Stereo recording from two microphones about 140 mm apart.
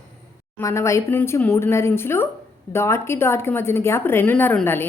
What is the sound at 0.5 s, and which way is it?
A woman's voice, 20° left (ahead or behind).